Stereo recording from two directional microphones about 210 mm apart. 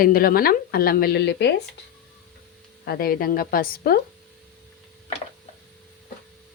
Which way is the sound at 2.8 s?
45° left (ahead or behind).